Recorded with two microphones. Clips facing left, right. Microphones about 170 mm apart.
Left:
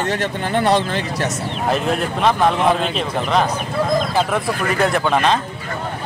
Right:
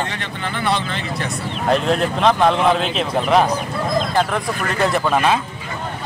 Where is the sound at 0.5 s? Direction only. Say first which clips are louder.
Left 5 dB; 55° left (ahead or behind).